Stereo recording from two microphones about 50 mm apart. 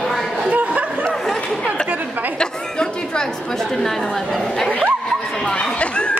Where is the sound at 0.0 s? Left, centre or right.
Centre.